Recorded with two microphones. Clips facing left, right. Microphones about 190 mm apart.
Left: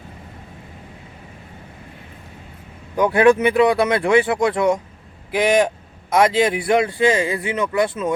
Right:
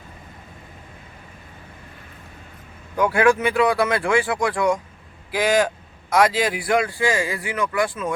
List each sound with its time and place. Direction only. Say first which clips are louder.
2.9 s a man's voice: left 4 dB; 20° left (ahead or behind)